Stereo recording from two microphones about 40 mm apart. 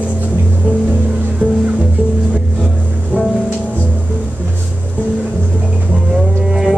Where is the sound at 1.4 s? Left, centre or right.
Left.